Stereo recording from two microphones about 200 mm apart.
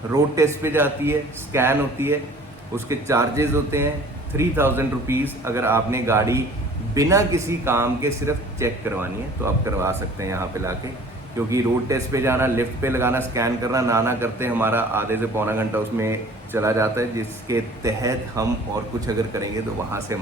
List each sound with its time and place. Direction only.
0.1 s a man's voice: 15° right (ahead or behind)